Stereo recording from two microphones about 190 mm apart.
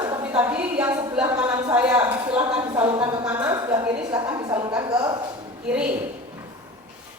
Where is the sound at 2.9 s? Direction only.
20° right (ahead or behind).